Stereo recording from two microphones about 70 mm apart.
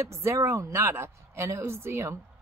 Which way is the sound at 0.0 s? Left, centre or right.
Right.